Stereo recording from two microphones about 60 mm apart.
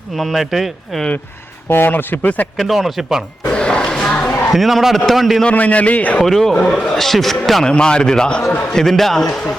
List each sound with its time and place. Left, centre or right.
0.2 s a man's voice: centre
1.7 s speech: left
2.6 s a man's voice: centre
3.5 s music: centre
4.5 s a man's voice: centre
5.4 s a man's voice: left
6.2 s a man's voice: centre
7.7 s a man's voice: centre